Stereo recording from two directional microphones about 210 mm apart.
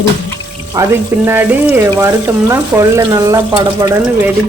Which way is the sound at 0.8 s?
10° right (ahead or behind).